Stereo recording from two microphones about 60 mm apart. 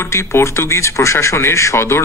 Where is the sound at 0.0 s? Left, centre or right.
Left.